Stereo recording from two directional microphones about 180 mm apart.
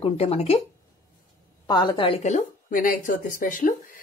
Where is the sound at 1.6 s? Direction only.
20° left (ahead or behind).